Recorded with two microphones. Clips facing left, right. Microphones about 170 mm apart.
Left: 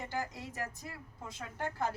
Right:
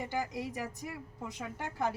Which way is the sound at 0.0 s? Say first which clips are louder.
Right 4 dB; 15° right (ahead or behind).